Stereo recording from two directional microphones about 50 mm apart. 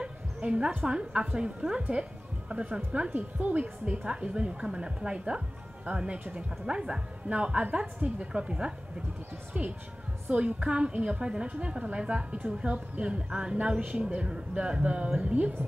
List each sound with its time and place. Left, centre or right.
0.0 s a woman's voice: right
1.8 s a woman's voice: right
3.1 s a woman's voice: right
9.5 s a woman's voice: right